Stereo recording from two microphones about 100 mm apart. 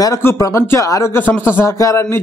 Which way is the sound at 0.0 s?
30° left (ahead or behind).